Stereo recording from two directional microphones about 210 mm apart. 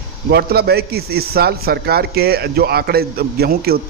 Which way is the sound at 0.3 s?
50° right (ahead or behind).